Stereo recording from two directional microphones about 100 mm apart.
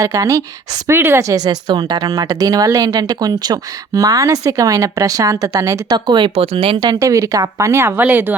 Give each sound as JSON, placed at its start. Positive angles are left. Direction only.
{"t": 0.0, "sound": "speech", "side_deg": -30}
{"t": 0.9, "sound": "speech", "side_deg": -25}
{"t": 6.1, "sound": "speech", "side_deg": -50}
{"t": 6.3, "sound": "speech", "side_deg": -75}
{"t": 6.8, "sound": "a woman's voice", "side_deg": -30}